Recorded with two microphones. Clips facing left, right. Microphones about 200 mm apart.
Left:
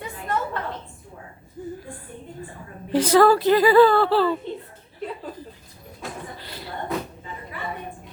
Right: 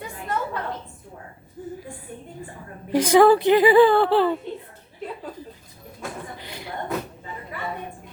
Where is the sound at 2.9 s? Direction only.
10° right (ahead or behind).